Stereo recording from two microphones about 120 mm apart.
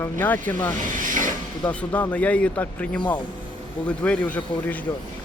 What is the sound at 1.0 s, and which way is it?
Snake, 90° right.